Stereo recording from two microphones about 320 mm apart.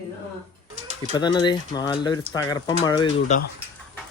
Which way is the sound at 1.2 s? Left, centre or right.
Centre.